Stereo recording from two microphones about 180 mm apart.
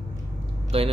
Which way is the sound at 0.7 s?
30° right (ahead or behind).